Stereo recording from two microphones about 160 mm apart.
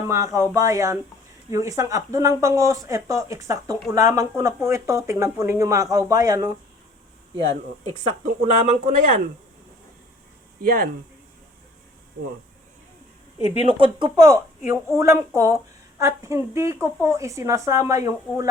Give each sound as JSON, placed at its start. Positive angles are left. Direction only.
{"t": 0.1, "sound": "speech", "side_deg": -20}
{"t": 7.9, "sound": "speech", "side_deg": -45}
{"t": 10.6, "sound": "speech", "side_deg": -65}
{"t": 13.4, "sound": "speech", "side_deg": 40}
{"t": 13.7, "sound": "a woman's voice", "side_deg": -30}